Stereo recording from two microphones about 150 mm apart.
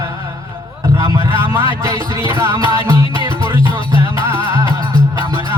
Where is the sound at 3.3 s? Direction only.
35° left (ahead or behind).